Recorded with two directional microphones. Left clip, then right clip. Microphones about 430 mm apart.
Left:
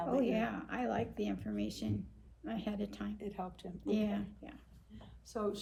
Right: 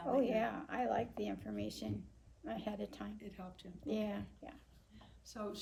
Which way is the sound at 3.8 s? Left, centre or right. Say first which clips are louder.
Left 4 dB; right.